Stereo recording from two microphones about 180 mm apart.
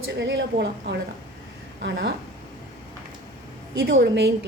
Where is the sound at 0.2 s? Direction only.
85° right.